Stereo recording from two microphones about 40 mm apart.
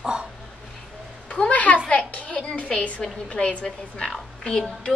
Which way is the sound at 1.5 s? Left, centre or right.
Left.